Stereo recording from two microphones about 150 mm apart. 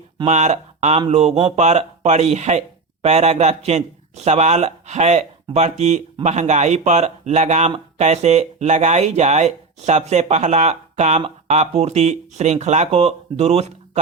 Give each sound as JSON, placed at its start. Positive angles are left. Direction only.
{"t": 0.3, "sound": "speech", "side_deg": -50}